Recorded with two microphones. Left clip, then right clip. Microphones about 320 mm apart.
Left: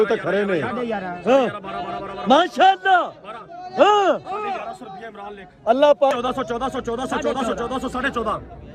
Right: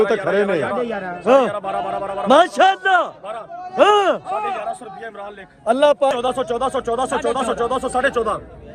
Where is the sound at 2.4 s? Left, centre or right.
Centre.